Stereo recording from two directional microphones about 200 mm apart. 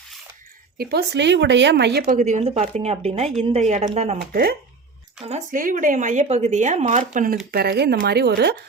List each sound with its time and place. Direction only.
0.8 s a woman's voice: 50° right (ahead or behind)
2.1 s a woman's voice: 35° right (ahead or behind)
4.3 s speech: 50° right (ahead or behind)
5.2 s a woman's voice: 35° right (ahead or behind)
7.5 s speech: 55° right (ahead or behind)